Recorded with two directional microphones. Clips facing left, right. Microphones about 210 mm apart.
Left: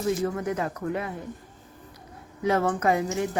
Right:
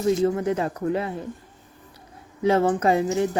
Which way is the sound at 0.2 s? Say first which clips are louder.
Right 5 dB; 25° right (ahead or behind).